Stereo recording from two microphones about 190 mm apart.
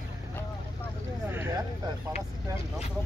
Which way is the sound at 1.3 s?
10° right (ahead or behind).